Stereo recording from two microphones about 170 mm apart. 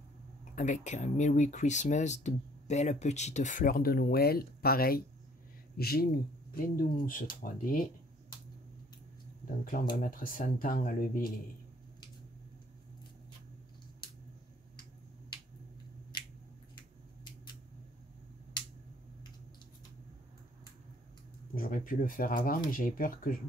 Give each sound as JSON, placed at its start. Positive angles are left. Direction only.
{"t": 0.8, "sound": "speech", "side_deg": 45}
{"t": 9.7, "sound": "speech", "side_deg": 50}
{"t": 16.1, "sound": "squish", "side_deg": 25}
{"t": 18.6, "sound": "a sound", "side_deg": 25}
{"t": 21.5, "sound": "speech", "side_deg": 55}